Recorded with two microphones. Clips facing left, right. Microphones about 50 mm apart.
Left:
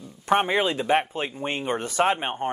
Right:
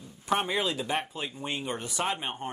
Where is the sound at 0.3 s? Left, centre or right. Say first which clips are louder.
Left 6 dB; left.